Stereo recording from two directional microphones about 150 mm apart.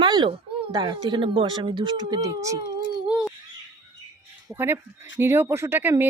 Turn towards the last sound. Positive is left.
turn(degrees=-15)  # may be behind; listen again after turning